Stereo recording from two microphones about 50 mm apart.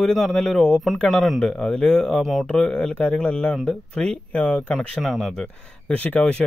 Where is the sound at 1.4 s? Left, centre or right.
Centre.